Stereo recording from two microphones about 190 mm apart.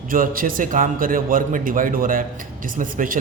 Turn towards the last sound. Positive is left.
turn(degrees=-45)  # may be behind; listen again after turning